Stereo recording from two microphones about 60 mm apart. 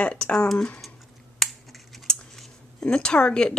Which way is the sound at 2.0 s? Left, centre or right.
Centre.